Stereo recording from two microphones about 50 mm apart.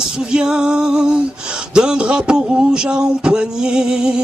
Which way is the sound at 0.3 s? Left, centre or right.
Centre.